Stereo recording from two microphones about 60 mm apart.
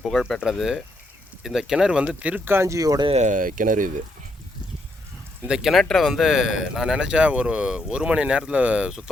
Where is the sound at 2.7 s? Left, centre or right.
Right.